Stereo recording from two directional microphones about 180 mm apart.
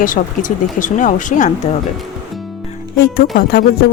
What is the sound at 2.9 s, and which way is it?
Speech, 60° left (ahead or behind).